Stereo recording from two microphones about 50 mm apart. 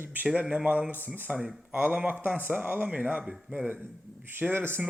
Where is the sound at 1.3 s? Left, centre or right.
Right.